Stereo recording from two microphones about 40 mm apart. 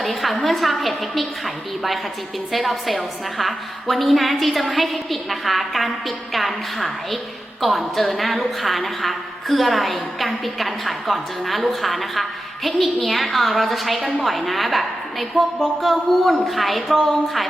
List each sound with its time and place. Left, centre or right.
0.0 s a woman's voice: centre
2.5 s a woman's voice: centre